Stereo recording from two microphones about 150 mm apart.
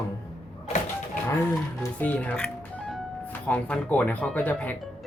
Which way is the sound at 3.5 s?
10° left (ahead or behind).